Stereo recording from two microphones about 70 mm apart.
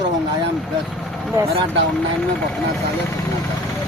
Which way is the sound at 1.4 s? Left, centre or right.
Right.